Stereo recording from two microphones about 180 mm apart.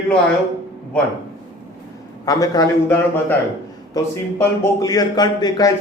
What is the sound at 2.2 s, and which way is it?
Speech, 20° left (ahead or behind).